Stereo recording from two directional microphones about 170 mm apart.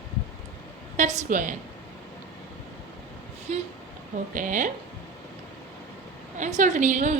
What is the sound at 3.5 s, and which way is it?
A woman's voice, 40° right (ahead or behind).